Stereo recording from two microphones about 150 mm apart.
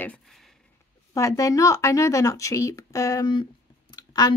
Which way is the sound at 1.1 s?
20° left (ahead or behind).